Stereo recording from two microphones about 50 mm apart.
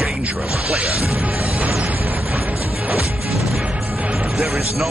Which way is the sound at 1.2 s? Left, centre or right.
Right.